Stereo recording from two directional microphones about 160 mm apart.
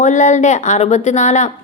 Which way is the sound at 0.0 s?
50° left (ahead or behind).